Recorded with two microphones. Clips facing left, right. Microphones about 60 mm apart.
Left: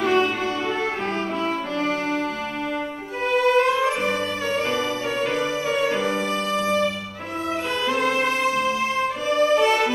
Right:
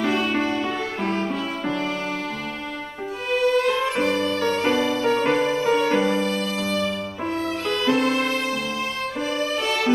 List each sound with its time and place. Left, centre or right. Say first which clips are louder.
3.4 s music: left 1 dB; left
3.7 s music: even; centre
4.6 s music: right 4 dB; right
6.0 s music: right 1 dB; left
8.0 s music: even; left
9.3 s music: left 8 dB; left